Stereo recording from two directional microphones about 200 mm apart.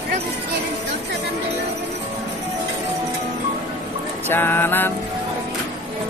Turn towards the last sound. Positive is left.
turn(degrees=10)  # may be behind; listen again after turning